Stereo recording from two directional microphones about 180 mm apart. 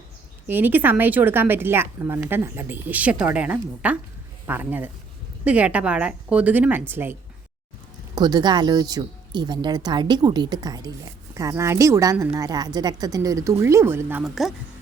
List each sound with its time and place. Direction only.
0.4 s speech: 10° right (ahead or behind)
8.1 s speech: 25° right (ahead or behind)
14.3 s speech: centre (ahead or behind)